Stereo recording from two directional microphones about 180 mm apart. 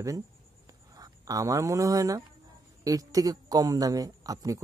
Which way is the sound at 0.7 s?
20° right (ahead or behind).